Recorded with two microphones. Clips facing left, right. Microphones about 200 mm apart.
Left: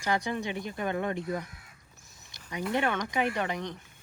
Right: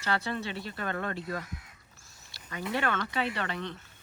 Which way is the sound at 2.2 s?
20° left (ahead or behind).